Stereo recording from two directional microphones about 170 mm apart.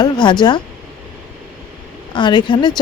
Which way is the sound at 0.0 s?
25° left (ahead or behind).